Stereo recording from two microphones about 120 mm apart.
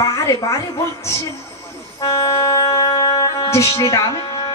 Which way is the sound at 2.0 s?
25° left (ahead or behind).